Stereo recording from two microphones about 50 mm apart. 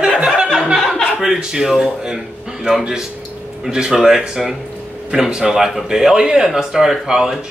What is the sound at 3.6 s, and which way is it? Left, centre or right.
Speech, centre.